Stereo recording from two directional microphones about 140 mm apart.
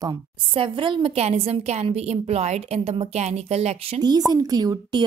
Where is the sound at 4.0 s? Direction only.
30° right (ahead or behind).